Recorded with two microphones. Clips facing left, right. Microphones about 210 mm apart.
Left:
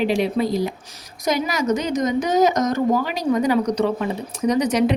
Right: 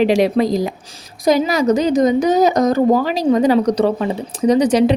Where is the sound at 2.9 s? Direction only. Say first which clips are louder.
Right 5 dB; 40° right (ahead or behind).